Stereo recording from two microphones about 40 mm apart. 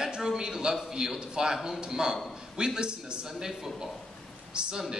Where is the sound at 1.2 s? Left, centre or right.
Centre.